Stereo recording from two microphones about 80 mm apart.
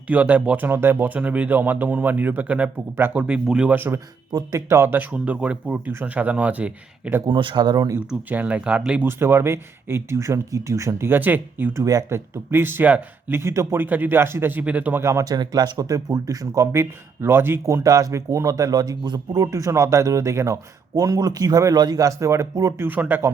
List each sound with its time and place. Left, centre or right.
0.1 s speech: centre
3.8 s speech: right
5.1 s speech: centre
7.3 s speech: right
7.9 s speech: centre
9.0 s speech: right
11.7 s speech: right
12.0 s speech: right
13.4 s speech: right
13.8 s speech: right
14.6 s speech: centre
15.2 s speech: right
17.8 s speech: right
22.9 s speech: right